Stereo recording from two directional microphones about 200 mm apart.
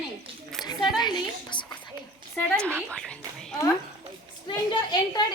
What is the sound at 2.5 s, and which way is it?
Speech, 5° left (ahead or behind).